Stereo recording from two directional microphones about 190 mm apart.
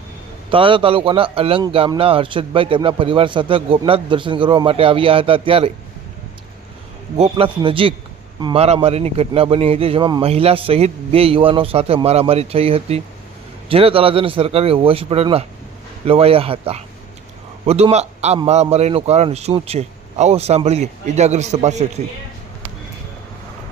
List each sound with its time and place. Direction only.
0.5 s speech: 25° right (ahead or behind)
7.2 s a man's voice: 30° right (ahead or behind)